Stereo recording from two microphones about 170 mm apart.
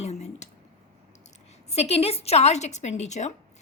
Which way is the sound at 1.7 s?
35° left (ahead or behind).